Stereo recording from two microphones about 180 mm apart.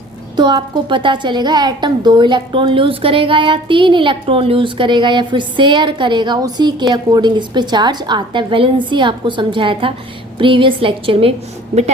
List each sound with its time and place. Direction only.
0.3 s a woman's voice: 25° right (ahead or behind)